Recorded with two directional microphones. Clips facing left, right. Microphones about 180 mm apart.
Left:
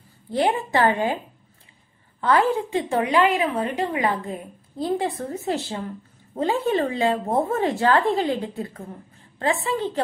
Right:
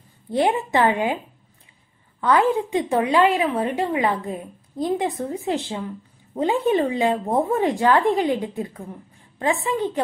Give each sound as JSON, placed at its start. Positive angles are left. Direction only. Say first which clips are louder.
{"t": 0.3, "sound": "a woman's voice", "louder": "right 1 dB", "side_deg": -20}
{"t": 2.2, "sound": "a woman's voice", "louder": "right 1 dB", "side_deg": -20}